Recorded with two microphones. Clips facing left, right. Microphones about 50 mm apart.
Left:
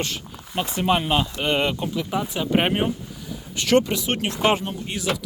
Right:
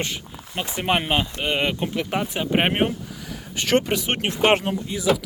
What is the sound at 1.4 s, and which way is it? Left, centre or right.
Speech, centre.